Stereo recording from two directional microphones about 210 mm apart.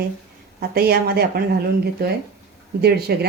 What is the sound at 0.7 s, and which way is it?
Speech, 45° right (ahead or behind).